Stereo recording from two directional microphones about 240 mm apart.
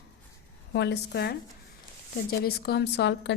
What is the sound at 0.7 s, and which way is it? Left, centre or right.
Speech, left.